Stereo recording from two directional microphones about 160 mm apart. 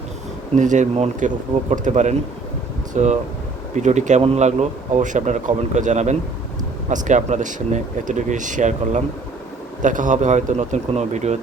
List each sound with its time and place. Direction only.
0.5 s speech: 50° right (ahead or behind)